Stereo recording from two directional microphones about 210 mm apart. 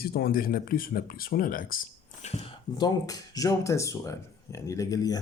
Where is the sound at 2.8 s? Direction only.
15° left (ahead or behind).